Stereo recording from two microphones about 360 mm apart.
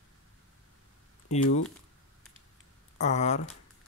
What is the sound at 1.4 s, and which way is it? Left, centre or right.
Speech, left.